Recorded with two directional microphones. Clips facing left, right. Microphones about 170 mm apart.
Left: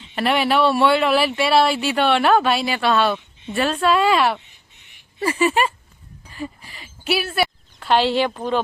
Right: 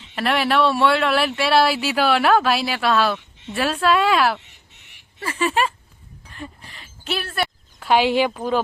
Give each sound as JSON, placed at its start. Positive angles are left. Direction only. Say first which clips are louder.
{"t": 0.2, "sound": "speech", "louder": "left 1 dB", "side_deg": 0}
{"t": 5.2, "sound": "speech", "louder": "left 5 dB", "side_deg": 10}
{"t": 5.5, "sound": "speech", "louder": "left 1 dB", "side_deg": 0}
{"t": 7.8, "sound": "speech", "louder": "right 1 dB", "side_deg": -10}